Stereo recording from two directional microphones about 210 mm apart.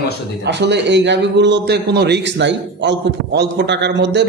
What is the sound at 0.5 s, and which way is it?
A man's voice, 55° right (ahead or behind).